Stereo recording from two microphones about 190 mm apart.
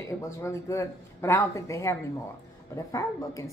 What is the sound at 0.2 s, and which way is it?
A woman's voice, 15° left (ahead or behind).